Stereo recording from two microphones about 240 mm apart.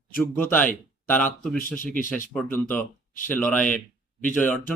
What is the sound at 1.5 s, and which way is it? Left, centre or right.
Speech, left.